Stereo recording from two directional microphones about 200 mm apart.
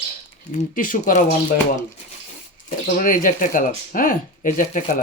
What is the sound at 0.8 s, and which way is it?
Speech, 40° left (ahead or behind).